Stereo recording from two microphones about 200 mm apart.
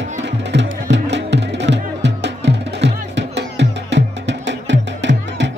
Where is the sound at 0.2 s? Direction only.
60° right (ahead or behind).